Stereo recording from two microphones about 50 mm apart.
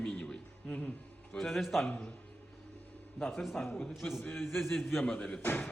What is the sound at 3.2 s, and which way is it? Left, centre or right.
A man's voice, centre.